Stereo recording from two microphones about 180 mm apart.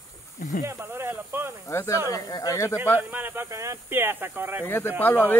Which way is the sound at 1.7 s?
15° left (ahead or behind).